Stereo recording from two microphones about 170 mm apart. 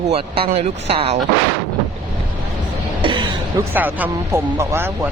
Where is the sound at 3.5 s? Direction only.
10° right (ahead or behind).